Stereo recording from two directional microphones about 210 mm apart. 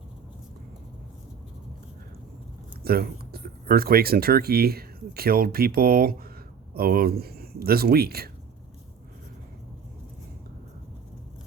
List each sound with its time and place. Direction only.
2.8 s speech: 45° right (ahead or behind)